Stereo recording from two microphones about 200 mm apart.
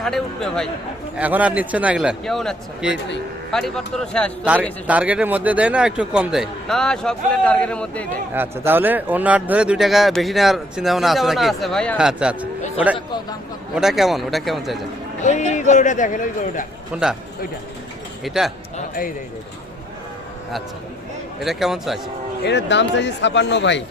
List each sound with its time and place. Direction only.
0.0 s a man's voice: centre (ahead or behind)
1.1 s a man's voice: 5° right (ahead or behind)
4.9 s a man's voice: 5° right (ahead or behind)
8.3 s a man's voice: 10° right (ahead or behind)
13.7 s a man's voice: centre (ahead or behind)
15.2 s speech: 35° left (ahead or behind)
16.9 s a man's voice: 5° right (ahead or behind)
18.2 s speech: centre (ahead or behind)
21.4 s a man's voice: centre (ahead or behind)
22.4 s speech: 60° left (ahead or behind)